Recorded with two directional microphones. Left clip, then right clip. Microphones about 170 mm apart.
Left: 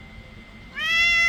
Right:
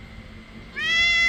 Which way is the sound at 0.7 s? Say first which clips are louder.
Even; 35° left (ahead or behind).